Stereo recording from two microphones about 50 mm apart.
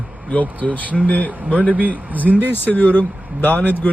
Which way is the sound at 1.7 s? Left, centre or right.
Right.